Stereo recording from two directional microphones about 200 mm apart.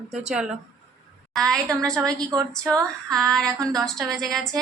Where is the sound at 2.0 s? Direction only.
15° right (ahead or behind).